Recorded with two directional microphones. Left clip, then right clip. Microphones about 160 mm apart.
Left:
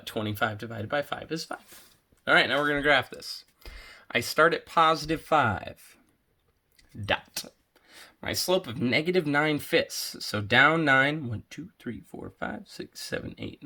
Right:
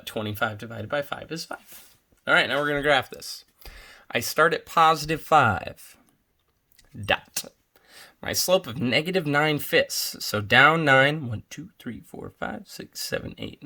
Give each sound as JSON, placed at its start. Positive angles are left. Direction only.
{"t": 0.0, "sound": "speech", "side_deg": -25}